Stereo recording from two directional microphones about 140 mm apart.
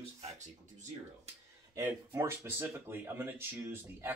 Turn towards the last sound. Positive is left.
turn(degrees=-15)  # may be behind; listen again after turning